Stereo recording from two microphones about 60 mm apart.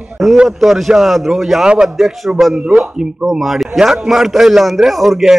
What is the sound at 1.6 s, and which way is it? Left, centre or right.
A man's voice, centre.